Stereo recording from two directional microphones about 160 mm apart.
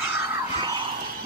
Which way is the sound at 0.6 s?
30° right (ahead or behind).